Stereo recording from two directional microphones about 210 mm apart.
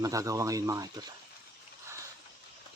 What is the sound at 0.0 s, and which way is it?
Speech, 15° right (ahead or behind).